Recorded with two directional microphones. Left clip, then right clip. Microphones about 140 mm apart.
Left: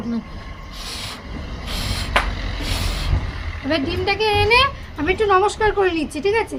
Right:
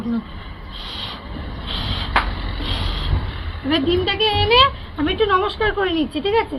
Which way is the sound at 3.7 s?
30° left (ahead or behind).